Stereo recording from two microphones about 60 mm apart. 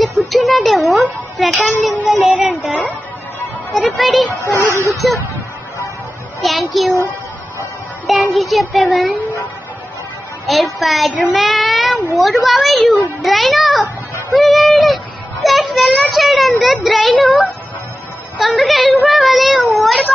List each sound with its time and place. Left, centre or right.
0.0 s a sound: centre
2.0 s a child's voice: centre
3.7 s a child's voice: centre
4.6 s speech: left
6.4 s a child's voice: centre
8.3 s a child's voice: centre
10.4 s a child's voice: centre
11.3 s child singing: centre
12.2 s a child's voice: centre
18.4 s a child's voice: centre